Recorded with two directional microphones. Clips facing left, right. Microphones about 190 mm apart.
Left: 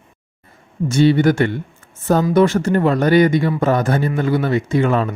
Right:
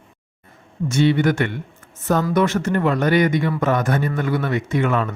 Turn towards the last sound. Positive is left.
turn(degrees=30)  # may be behind; listen again after turning